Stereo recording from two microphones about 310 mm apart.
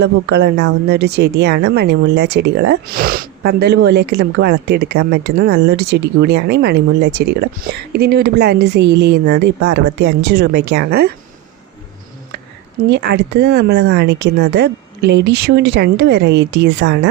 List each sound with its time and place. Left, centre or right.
0.0 s a woman's voice: right
12.9 s a woman's voice: right